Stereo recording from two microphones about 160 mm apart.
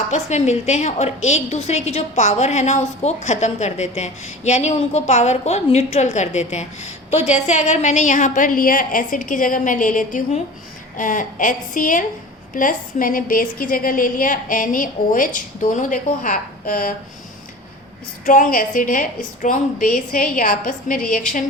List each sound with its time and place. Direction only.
0.1 s a woman's voice: 45° left (ahead or behind)
18.3 s a woman's voice: 55° left (ahead or behind)